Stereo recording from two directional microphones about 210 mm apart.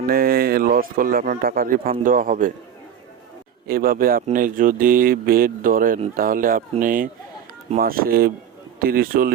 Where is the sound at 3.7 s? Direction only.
45° right (ahead or behind).